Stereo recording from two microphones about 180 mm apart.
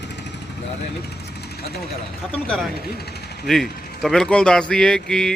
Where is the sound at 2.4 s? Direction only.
5° left (ahead or behind).